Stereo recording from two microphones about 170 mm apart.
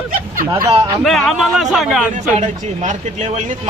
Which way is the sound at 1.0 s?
Centre (ahead or behind).